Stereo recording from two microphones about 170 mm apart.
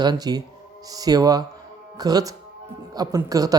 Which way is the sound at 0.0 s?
25° right (ahead or behind).